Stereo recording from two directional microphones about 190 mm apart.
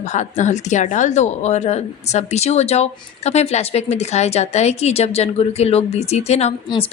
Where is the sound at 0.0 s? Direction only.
40° left (ahead or behind).